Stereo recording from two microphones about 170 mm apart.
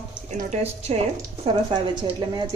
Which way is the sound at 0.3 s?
40° right (ahead or behind).